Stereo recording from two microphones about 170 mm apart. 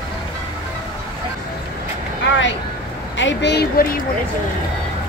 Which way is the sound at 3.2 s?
90° left.